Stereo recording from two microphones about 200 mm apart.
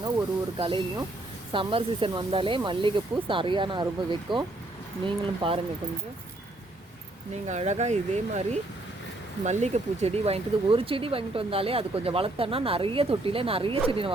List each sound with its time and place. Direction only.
0.5 s speech: 25° right (ahead or behind)
7.4 s speech: 35° right (ahead or behind)